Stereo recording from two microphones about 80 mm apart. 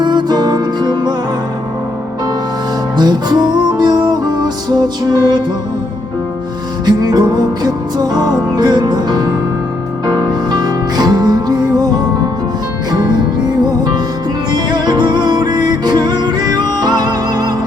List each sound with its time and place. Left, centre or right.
0.0 s music: right
3.0 s music: right
6.8 s music: right
14.5 s music: right